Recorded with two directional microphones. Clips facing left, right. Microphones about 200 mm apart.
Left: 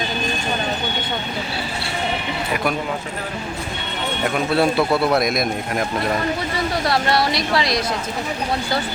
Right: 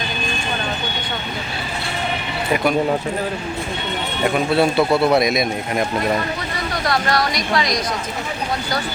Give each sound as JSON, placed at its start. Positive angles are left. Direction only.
{"t": 4.2, "sound": "a man's voice", "side_deg": 0}
{"t": 6.8, "sound": "speech", "side_deg": 30}